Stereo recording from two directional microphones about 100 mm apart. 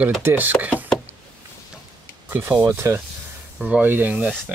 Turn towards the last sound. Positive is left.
turn(degrees=-15)  # may be behind; listen again after turning